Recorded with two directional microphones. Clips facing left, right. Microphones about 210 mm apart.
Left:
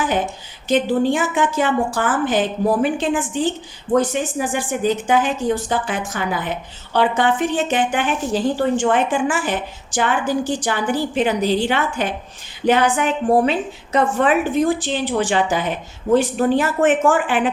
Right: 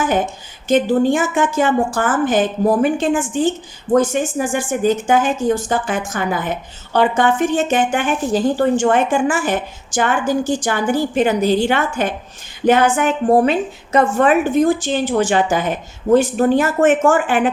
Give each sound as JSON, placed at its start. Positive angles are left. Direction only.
{"t": 0.7, "sound": "speech", "side_deg": -45}